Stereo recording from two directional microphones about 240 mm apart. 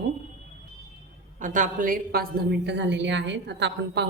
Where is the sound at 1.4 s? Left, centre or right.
Right.